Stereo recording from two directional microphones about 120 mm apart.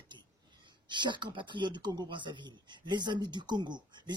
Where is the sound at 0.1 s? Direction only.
40° right (ahead or behind).